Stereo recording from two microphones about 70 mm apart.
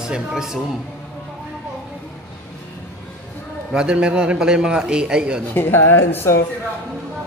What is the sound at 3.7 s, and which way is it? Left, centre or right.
Speech, centre.